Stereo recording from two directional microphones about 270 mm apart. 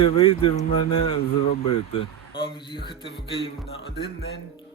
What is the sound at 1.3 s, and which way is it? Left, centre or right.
Speech, left.